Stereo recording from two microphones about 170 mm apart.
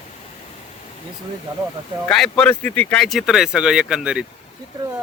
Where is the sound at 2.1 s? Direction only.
5° left (ahead or behind).